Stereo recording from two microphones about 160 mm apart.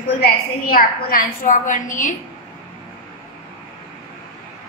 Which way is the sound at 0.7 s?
60° left (ahead or behind).